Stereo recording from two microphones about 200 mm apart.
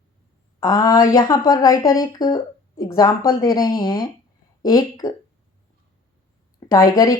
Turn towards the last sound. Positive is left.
turn(degrees=20)  # may be behind; listen again after turning